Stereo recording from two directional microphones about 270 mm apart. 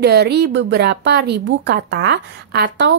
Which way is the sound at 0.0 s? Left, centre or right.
Right.